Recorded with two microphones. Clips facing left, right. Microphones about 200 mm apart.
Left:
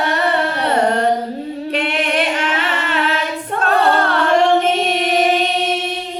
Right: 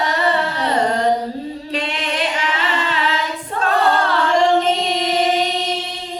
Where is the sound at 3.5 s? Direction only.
60° left (ahead or behind).